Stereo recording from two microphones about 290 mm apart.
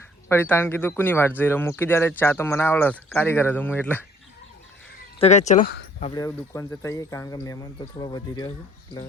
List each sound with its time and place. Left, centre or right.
0.3 s speech: centre
5.2 s speech: left
6.0 s speech: centre